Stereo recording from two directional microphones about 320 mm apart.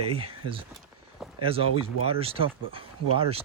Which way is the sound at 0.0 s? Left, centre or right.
Centre.